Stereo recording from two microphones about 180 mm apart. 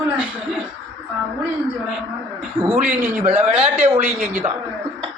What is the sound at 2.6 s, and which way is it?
A man's voice, 10° right (ahead or behind).